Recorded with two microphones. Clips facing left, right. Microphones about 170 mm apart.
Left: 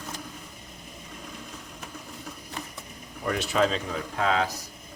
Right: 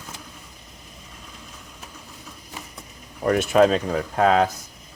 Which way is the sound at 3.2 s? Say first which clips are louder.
Right 8 dB; 50° right (ahead or behind).